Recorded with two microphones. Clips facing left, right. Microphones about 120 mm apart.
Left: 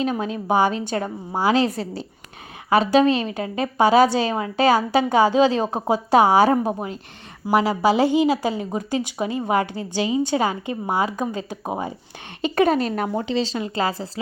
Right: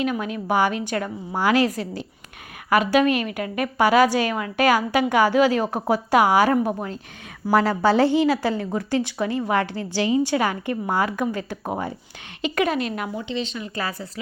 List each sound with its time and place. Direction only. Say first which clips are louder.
0.0 s a woman's voice: left 1 dB; 30° left (ahead or behind)
7.4 s speech: even; 10° left (ahead or behind)
12.5 s speech: left 5 dB; 35° left (ahead or behind)